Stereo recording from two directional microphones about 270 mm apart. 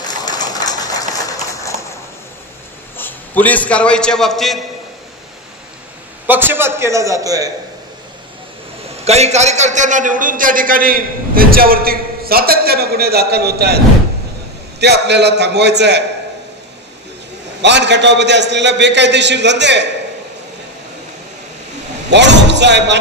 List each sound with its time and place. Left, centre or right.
0.1 s a sound: centre
3.0 s a man's voice: centre
6.2 s a man's voice: centre
9.0 s a man's voice: right
14.8 s a man's voice: right
17.6 s a man's voice: right
22.1 s a man's voice: right